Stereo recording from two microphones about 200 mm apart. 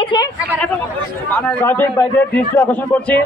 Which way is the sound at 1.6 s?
10° left (ahead or behind).